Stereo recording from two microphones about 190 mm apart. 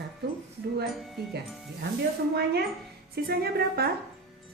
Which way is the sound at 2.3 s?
60° right (ahead or behind).